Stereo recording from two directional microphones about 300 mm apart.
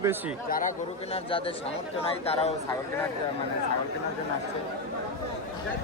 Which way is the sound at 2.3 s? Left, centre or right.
Left.